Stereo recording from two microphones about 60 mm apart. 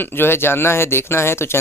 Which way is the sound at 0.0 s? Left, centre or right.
Left.